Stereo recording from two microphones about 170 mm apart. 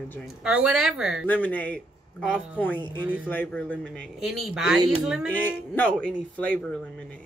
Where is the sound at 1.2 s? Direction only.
10° left (ahead or behind).